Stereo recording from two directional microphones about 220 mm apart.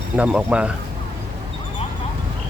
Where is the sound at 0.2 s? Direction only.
5° right (ahead or behind).